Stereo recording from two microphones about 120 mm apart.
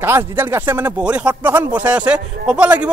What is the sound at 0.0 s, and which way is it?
Speech, 20° right (ahead or behind).